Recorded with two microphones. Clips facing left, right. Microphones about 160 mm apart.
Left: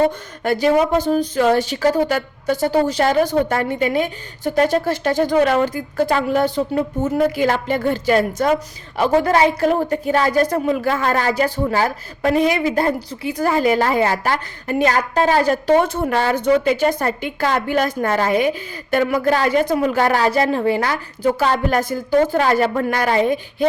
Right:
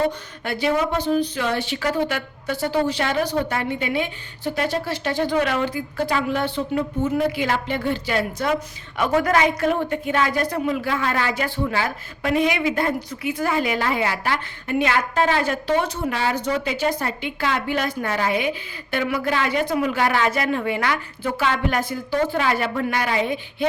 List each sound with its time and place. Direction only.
0.4 s speech: 45° left (ahead or behind)
9.0 s a woman's voice: 30° left (ahead or behind)